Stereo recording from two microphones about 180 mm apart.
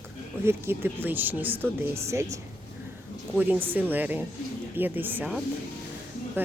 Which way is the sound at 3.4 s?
10° right (ahead or behind).